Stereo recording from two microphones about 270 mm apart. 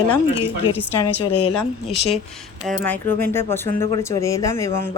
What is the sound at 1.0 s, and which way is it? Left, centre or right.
Speech, left.